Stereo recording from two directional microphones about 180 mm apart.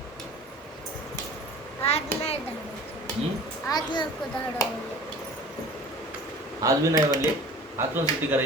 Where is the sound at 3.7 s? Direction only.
25° left (ahead or behind).